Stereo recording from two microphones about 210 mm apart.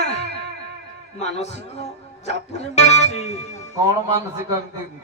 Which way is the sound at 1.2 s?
30° left (ahead or behind).